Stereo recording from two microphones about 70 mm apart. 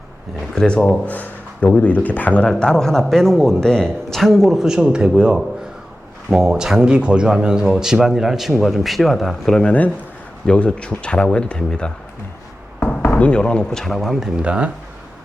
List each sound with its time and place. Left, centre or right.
0.5 s speech: centre
1.0 s speech: left
2.5 s speech: centre
9.6 s speech: left
13.1 s speech: centre
13.8 s speech: centre
14.4 s speech: centre